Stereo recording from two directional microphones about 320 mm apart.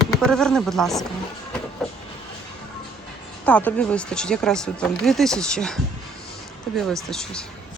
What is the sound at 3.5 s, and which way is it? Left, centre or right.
Speech, centre.